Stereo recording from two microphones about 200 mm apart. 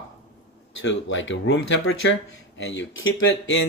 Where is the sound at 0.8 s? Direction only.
70° left (ahead or behind).